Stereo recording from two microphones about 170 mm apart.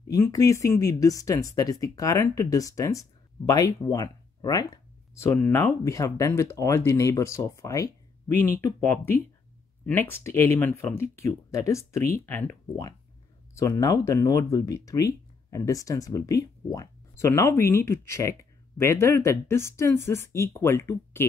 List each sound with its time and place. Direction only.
0.1 s speech: 20° left (ahead or behind)